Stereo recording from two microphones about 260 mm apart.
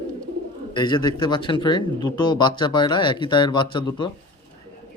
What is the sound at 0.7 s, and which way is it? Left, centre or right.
Speech, centre.